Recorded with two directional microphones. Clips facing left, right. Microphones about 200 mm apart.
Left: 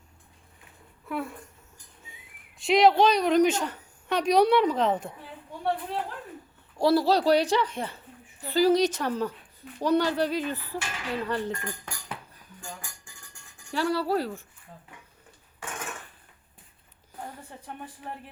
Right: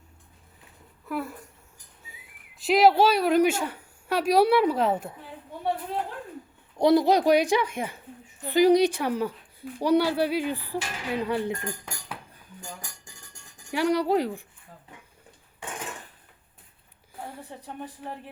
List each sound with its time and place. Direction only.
1.0 s speech: centre (ahead or behind)
6.7 s a woman's voice: 20° right (ahead or behind)
13.7 s a woman's voice: 15° right (ahead or behind)